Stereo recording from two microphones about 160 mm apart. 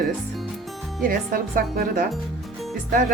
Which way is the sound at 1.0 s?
65° right (ahead or behind).